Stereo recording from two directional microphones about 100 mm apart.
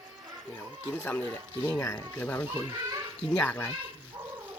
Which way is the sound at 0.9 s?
15° left (ahead or behind).